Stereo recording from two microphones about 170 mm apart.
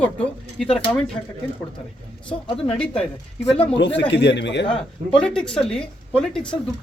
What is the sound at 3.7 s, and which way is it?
Speech, 90° left.